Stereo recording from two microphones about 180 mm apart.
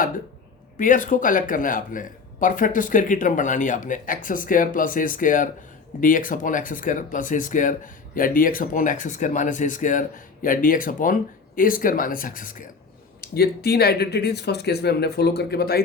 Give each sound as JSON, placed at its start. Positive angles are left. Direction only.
{"t": 0.8, "sound": "speech", "side_deg": 45}